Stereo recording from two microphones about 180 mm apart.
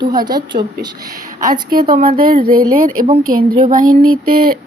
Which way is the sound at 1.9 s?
50° right (ahead or behind).